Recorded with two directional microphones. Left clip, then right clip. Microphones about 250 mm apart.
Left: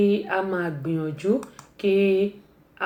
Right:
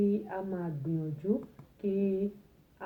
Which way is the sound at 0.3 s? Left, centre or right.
Left.